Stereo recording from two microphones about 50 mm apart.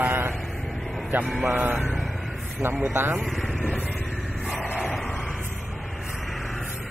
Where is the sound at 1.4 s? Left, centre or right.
Right.